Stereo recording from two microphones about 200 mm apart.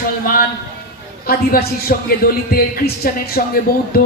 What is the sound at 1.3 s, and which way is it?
A man's voice, 50° left (ahead or behind).